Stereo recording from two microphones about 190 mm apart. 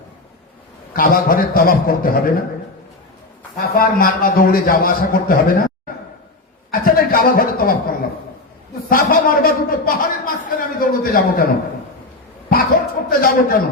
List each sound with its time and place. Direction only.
0.9 s a man's voice: 50° left (ahead or behind)
3.6 s a man's voice: 50° left (ahead or behind)
6.7 s a man's voice: 50° left (ahead or behind)
12.5 s a sound: 50° left (ahead or behind)